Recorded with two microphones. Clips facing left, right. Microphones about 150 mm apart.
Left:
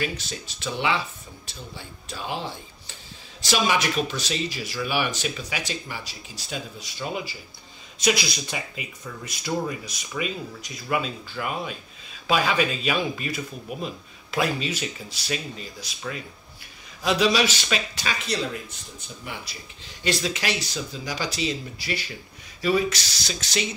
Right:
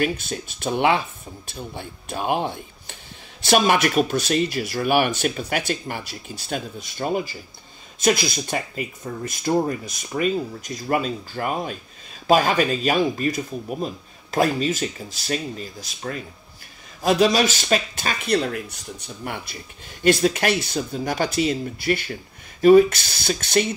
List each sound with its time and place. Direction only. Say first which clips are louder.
0.0 s speech: right 6 dB; 50° right (ahead or behind)